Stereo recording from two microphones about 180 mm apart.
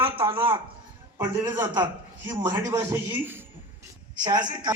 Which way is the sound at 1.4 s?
25° right (ahead or behind).